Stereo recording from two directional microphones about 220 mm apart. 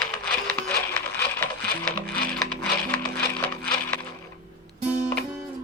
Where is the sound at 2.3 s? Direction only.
5° left (ahead or behind).